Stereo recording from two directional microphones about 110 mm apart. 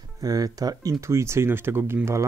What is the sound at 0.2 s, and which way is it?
Speech, 35° right (ahead or behind).